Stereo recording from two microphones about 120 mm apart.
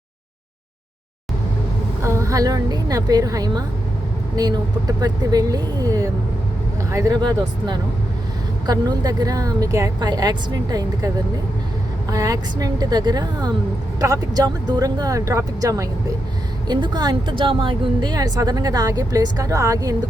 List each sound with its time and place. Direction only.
2.0 s a woman's voice: 25° right (ahead or behind)
12.1 s a woman's voice: 30° right (ahead or behind)